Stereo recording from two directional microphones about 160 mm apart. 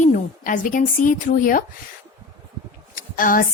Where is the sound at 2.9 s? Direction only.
60° left (ahead or behind).